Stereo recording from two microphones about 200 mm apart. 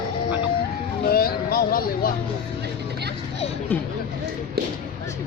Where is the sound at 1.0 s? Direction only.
50° left (ahead or behind).